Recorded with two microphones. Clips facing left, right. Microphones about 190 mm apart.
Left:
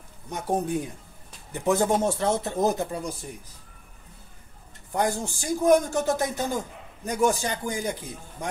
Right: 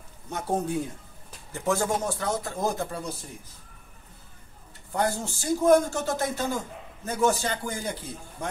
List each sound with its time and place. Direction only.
0.3 s a man's voice: 15° left (ahead or behind)
4.9 s speech: 15° left (ahead or behind)